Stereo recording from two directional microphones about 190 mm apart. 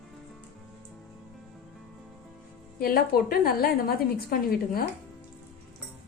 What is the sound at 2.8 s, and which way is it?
A woman's voice, 55° left (ahead or behind).